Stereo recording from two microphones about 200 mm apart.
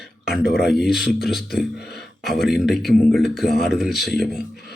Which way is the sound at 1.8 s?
55° left (ahead or behind).